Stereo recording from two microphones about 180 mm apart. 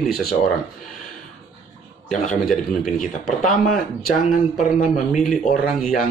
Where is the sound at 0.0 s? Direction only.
Centre (ahead or behind).